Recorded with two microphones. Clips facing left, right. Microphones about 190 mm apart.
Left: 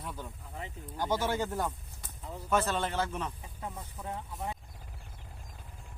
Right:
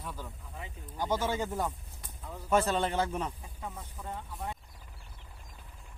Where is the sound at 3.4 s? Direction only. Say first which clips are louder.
Left 1 dB; 5° left (ahead or behind).